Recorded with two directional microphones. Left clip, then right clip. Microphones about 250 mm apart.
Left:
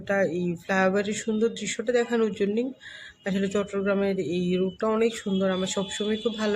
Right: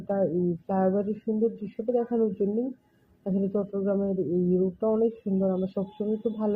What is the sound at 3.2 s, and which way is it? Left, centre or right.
Speech, centre.